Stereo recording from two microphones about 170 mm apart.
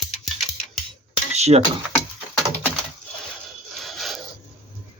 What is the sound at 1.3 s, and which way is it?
Dishes, 40° right (ahead or behind).